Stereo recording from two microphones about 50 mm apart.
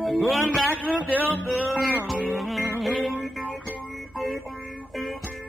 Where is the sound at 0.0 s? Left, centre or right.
Centre.